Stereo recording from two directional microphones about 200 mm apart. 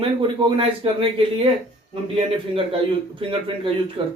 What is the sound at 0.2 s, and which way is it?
Speech, 25° right (ahead or behind).